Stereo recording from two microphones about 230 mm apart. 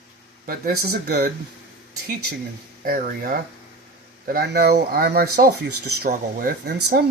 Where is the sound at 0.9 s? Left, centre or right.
Right.